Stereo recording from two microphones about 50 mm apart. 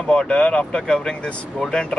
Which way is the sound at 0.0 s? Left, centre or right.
Centre.